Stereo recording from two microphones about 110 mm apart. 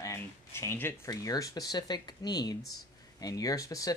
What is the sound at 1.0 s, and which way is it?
Speech, 35° left (ahead or behind).